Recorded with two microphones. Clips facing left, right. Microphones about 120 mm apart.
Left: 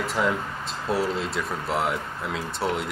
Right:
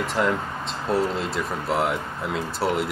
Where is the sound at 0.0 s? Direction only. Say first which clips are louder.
Right 2 dB; centre (ahead or behind).